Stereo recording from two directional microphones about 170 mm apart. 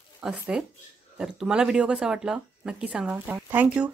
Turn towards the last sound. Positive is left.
turn(degrees=-10)  # may be behind; listen again after turning